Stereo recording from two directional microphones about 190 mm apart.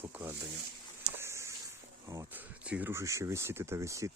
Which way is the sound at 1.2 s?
15° right (ahead or behind).